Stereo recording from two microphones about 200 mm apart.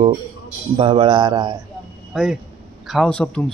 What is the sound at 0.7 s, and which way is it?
Speech, 25° right (ahead or behind).